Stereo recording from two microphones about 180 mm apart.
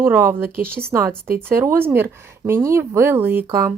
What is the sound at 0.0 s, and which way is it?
Speech, 10° right (ahead or behind).